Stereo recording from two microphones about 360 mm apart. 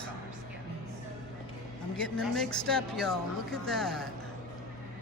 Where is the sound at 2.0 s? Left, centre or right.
Centre.